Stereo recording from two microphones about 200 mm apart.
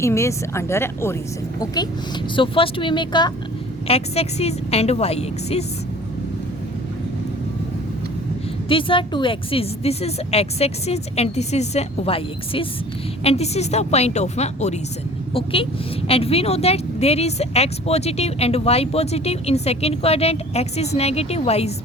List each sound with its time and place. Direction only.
0.0 s a woman's voice: 15° left (ahead or behind); by 5.6 s 30° left (ahead or behind)
8.7 s a woman's voice: 25° left (ahead or behind)